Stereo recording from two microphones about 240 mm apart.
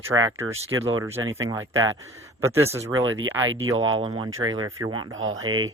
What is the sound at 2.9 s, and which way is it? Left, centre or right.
Speech, right.